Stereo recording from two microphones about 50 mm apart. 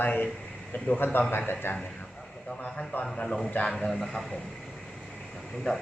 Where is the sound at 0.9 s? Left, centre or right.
Left.